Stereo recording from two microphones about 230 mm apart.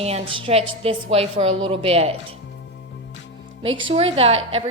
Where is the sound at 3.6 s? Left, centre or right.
Right.